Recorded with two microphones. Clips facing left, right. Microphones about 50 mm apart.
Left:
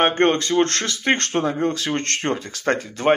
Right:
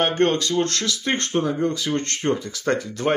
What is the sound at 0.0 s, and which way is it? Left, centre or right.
Speech, left.